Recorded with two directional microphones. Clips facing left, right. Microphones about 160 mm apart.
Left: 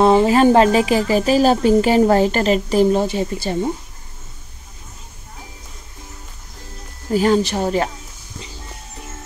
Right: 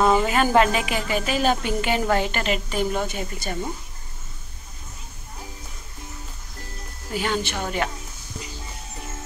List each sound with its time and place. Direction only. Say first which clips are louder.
0.0 s a woman's voice: left 7 dB; 30° left (ahead or behind)
7.1 s a woman's voice: left 10 dB; 40° left (ahead or behind)